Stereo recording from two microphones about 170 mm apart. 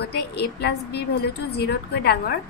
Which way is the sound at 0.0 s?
75° left (ahead or behind).